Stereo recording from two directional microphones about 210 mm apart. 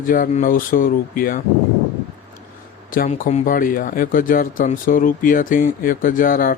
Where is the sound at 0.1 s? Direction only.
40° left (ahead or behind).